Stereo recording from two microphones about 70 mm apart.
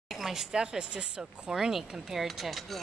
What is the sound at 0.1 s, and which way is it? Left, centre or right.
Speech, centre.